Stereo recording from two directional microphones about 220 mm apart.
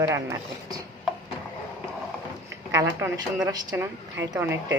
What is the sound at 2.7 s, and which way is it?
Speech, 15° right (ahead or behind).